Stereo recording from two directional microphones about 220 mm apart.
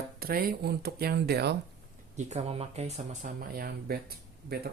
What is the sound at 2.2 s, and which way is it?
Speech, 30° right (ahead or behind).